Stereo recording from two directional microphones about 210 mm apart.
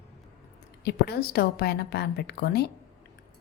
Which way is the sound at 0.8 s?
50° left (ahead or behind).